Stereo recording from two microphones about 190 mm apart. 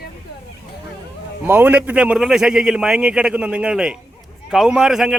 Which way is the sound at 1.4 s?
10° right (ahead or behind).